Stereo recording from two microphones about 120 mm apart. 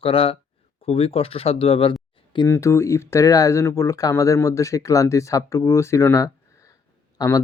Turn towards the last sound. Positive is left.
turn(degrees=30)  # may be behind; listen again after turning